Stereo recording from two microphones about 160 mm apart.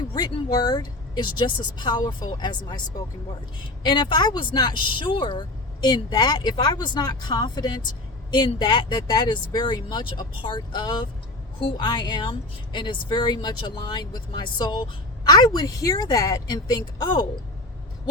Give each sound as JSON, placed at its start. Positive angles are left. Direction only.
{"t": 0.1, "sound": "speech", "side_deg": 25}
{"t": 3.8, "sound": "speech", "side_deg": 30}